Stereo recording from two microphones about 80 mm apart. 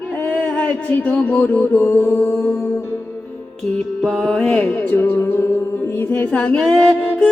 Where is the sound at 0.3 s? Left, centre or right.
Left.